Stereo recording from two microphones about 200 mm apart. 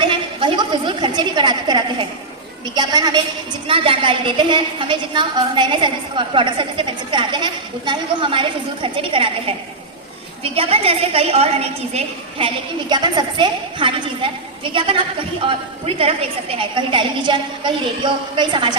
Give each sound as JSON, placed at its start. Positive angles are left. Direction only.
{"t": 0.1, "sound": "a woman's voice", "side_deg": -25}